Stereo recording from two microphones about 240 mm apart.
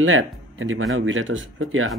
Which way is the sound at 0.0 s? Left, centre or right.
Right.